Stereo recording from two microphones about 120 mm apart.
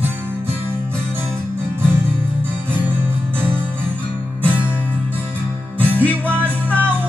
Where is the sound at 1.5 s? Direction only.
20° right (ahead or behind).